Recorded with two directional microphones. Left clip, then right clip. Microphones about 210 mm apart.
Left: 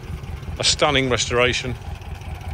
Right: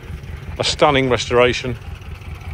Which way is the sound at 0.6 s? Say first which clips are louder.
Right 3 dB; 5° left (ahead or behind).